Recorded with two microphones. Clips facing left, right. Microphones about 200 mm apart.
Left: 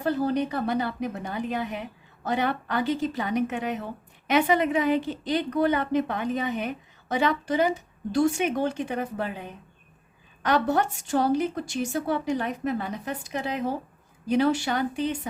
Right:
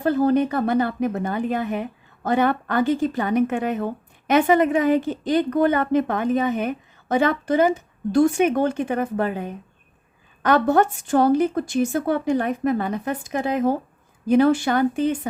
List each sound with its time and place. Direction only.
0.0 s a woman's voice: 50° right (ahead or behind)